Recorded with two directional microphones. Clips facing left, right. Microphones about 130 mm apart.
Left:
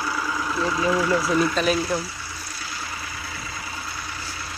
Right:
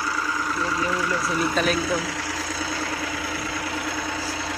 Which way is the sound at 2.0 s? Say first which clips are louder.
Right 4 dB; 90° right.